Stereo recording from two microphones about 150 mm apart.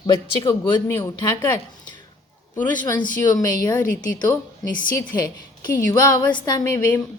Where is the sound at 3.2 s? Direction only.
25° left (ahead or behind).